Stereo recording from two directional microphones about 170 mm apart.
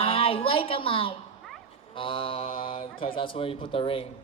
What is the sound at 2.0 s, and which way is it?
Mantra, 30° left (ahead or behind).